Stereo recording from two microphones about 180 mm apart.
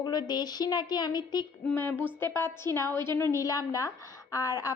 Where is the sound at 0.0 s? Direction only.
25° left (ahead or behind).